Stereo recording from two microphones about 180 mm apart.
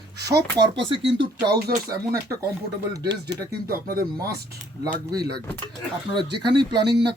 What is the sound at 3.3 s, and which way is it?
Speech, 55° right (ahead or behind).